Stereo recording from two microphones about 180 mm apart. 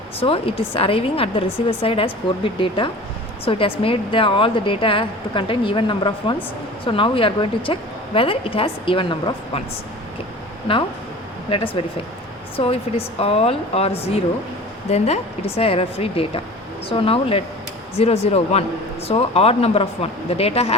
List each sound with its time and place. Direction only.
0.2 s a woman's voice: 30° left (ahead or behind)
11.4 s speech: 30° left (ahead or behind)